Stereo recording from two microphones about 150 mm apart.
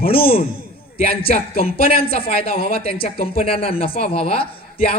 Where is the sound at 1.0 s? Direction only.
40° left (ahead or behind).